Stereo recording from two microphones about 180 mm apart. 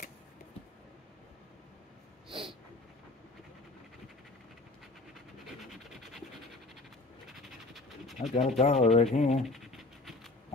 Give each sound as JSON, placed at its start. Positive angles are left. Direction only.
{"t": 2.2, "sound": "a sound", "side_deg": -30}
{"t": 5.4, "sound": "scratch", "side_deg": 0}
{"t": 8.4, "sound": "speech", "side_deg": 35}
{"t": 9.4, "sound": "dog", "side_deg": 0}